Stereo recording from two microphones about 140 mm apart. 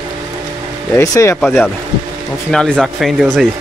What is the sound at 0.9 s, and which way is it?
Speech, 20° left (ahead or behind).